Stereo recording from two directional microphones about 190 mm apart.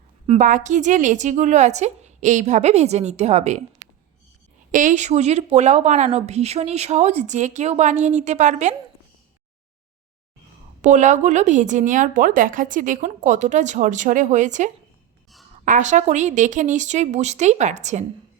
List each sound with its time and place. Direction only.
0.3 s a woman's voice: 40° right (ahead or behind)
4.7 s a woman's voice: 40° right (ahead or behind)
10.8 s a woman's voice: 40° right (ahead or behind)